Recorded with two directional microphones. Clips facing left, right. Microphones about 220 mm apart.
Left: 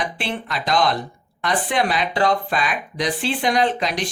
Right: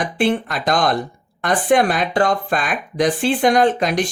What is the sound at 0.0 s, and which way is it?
Speech, 50° right (ahead or behind).